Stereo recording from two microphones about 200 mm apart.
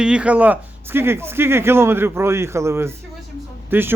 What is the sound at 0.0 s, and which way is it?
Speech, 5° right (ahead or behind).